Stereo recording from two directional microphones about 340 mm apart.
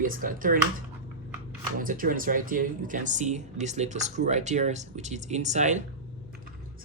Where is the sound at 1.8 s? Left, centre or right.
Right.